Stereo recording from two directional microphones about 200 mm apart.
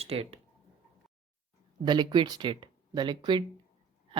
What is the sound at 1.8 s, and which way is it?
Speech, 20° right (ahead or behind).